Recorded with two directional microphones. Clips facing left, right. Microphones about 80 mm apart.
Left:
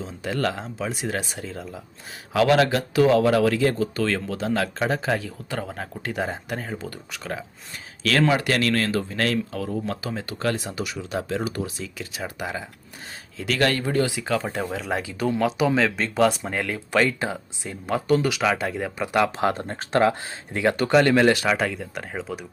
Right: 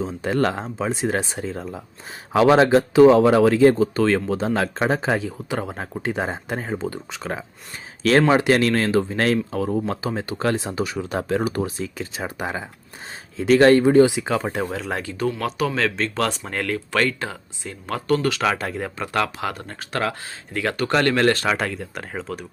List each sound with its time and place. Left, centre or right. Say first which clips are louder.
0.0 s speech: right 5 dB; right
10.9 s speech: right 3 dB; right; by 15.1 s centre
15.2 s speech: left 2 dB; centre
18.9 s speech: left 3 dB; centre
19.5 s speech: left 4 dB; left; by 22.4 s centre